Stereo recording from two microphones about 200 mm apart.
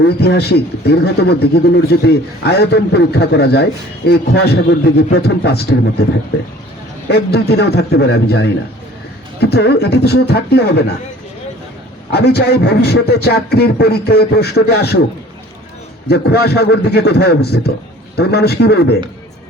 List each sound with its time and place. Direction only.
0.2 s a man's voice: 55° left (ahead or behind)
7.1 s speech: 55° left (ahead or behind)
12.1 s speech: 55° left (ahead or behind)
16.0 s speech: 55° left (ahead or behind)